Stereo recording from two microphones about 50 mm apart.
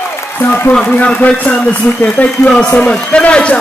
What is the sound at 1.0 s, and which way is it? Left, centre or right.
A man's voice, left.